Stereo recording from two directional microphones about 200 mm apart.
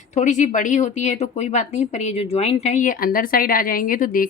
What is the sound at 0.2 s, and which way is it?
Speech, 35° left (ahead or behind).